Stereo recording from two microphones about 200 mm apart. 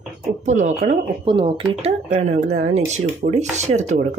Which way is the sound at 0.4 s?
35° right (ahead or behind).